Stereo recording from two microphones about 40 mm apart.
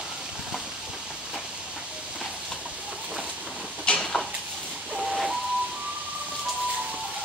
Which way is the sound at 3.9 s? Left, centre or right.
Left.